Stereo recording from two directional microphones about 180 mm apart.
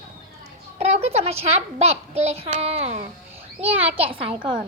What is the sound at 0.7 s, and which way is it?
A woman's voice, 35° right (ahead or behind).